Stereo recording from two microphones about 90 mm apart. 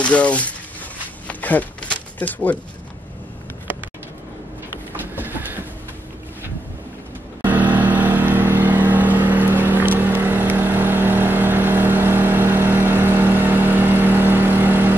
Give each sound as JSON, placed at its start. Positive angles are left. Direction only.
{"t": 0.0, "sound": "speech", "side_deg": 15}
{"t": 1.2, "sound": "a sound", "side_deg": 15}
{"t": 5.1, "sound": "train", "side_deg": -20}
{"t": 7.4, "sound": "vehicle", "side_deg": -20}